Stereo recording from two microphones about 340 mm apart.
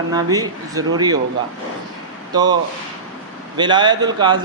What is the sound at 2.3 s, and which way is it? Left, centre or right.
Speech, centre.